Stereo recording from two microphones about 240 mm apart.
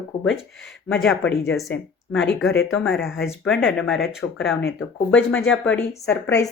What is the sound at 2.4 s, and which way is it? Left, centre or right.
Speech, centre.